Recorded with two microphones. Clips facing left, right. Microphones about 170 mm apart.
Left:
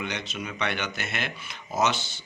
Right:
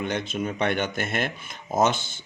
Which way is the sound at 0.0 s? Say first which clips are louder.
Right 6 dB; 50° right (ahead or behind).